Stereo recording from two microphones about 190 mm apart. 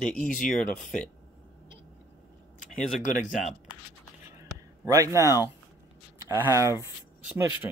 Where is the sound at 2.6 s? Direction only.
Centre (ahead or behind).